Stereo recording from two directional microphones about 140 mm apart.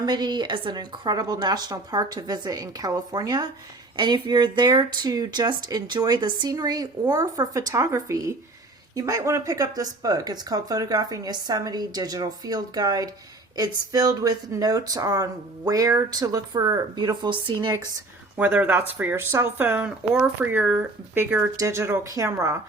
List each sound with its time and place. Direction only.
0.0 s speech: 30° right (ahead or behind)
18.3 s speech: 15° right (ahead or behind)